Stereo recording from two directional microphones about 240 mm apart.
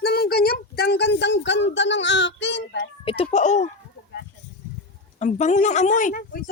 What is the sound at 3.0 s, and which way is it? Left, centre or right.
Speech, left.